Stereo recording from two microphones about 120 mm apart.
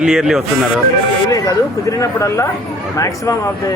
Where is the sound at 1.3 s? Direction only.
30° left (ahead or behind).